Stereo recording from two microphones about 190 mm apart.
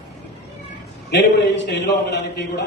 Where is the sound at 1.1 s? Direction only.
70° left (ahead or behind).